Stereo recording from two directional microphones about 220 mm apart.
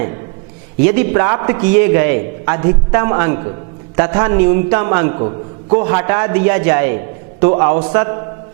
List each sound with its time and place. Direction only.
0.9 s a man's voice: 20° right (ahead or behind)